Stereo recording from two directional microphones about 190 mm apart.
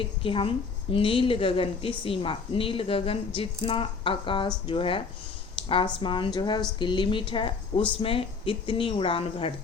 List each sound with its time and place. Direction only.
0.0 s a woman's voice: 30° left (ahead or behind)